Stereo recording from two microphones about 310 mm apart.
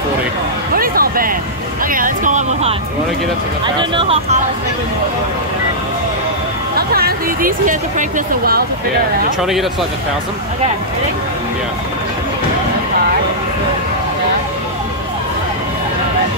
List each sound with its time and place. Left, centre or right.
0.7 s music: right
1.9 s speech: right
6.9 s speech: right
9.4 s speech: centre